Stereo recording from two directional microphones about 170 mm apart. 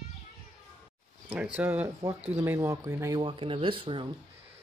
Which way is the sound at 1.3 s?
5° right (ahead or behind).